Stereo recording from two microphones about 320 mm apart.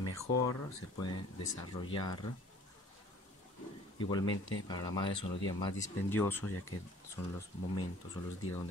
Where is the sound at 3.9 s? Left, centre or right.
Centre.